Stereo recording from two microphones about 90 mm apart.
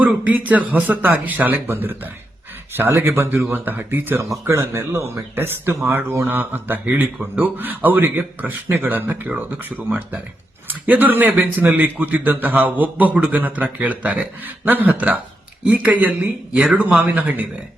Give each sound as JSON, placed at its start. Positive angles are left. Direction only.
{"t": 0.0, "sound": "speech", "side_deg": -15}